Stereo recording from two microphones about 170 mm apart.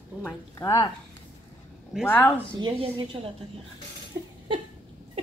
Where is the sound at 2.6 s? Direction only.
25° right (ahead or behind).